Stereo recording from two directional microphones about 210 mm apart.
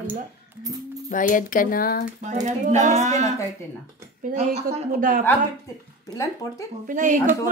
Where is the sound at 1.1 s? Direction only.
40° left (ahead or behind).